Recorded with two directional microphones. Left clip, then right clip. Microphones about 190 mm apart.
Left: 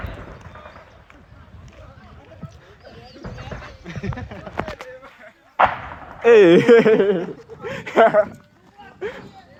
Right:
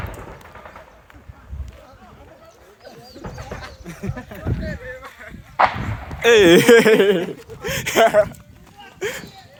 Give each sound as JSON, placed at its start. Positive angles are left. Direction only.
{"t": 3.8, "sound": "speech", "side_deg": -65}
{"t": 6.2, "sound": "speech", "side_deg": -30}
{"t": 7.6, "sound": "a sound", "side_deg": -40}